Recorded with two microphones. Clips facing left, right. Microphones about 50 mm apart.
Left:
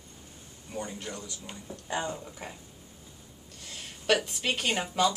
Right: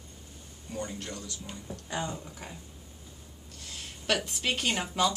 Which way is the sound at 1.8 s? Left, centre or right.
Left.